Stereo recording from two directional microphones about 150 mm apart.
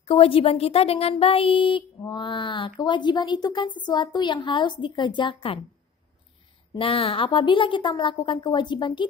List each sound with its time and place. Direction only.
0.0 s speech: 40° left (ahead or behind)
6.7 s speech: 35° left (ahead or behind)